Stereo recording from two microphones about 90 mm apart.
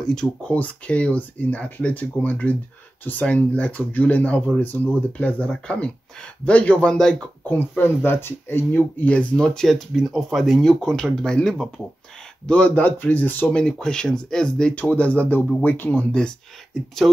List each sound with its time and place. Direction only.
0.0 s speech: 10° left (ahead or behind)
7.4 s speech: 20° left (ahead or behind)